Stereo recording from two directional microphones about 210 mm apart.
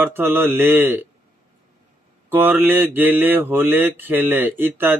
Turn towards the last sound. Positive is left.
turn(degrees=-10)  # may be behind; listen again after turning